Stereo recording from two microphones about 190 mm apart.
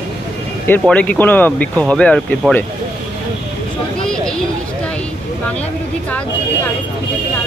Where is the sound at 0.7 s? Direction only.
5° left (ahead or behind).